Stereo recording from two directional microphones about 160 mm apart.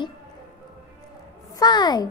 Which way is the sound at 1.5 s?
25° left (ahead or behind).